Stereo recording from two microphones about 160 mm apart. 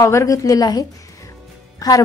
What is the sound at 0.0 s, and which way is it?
A woman's voice, 20° left (ahead or behind).